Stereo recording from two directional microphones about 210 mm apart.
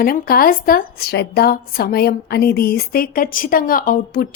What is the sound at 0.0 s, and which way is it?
A woman's voice, 45° left (ahead or behind).